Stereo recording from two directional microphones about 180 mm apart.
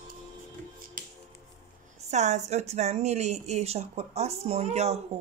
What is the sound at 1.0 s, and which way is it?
Music, 50° right (ahead or behind).